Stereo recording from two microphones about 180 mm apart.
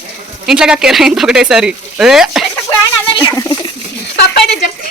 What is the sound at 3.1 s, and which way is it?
Speech, 20° left (ahead or behind).